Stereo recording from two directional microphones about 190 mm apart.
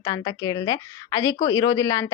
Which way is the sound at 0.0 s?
20° left (ahead or behind).